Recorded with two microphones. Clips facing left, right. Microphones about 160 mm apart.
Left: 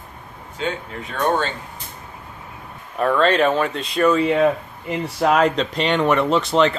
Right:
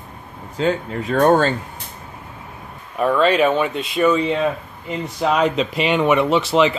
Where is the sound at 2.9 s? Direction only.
5° right (ahead or behind).